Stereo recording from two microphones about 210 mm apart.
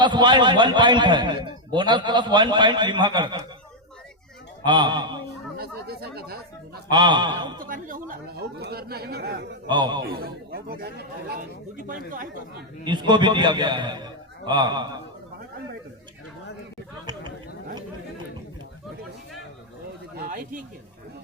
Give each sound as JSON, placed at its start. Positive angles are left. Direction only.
{"t": 0.0, "sound": "a man's voice", "side_deg": -20}
{"t": 4.6, "sound": "a man's voice", "side_deg": -20}
{"t": 5.5, "sound": "chatter", "side_deg": -50}
{"t": 6.9, "sound": "a man's voice", "side_deg": -20}
{"t": 7.6, "sound": "speech", "side_deg": -40}
{"t": 9.6, "sound": "a man's voice", "side_deg": -20}
{"t": 10.0, "sound": "speech", "side_deg": -45}
{"t": 12.8, "sound": "a man's voice", "side_deg": -20}
{"t": 20.1, "sound": "speech", "side_deg": -40}